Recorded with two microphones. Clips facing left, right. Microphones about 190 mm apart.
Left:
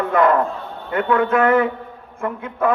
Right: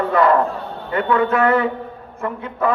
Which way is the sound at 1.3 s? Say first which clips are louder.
Left 1 dB; 50° left (ahead or behind).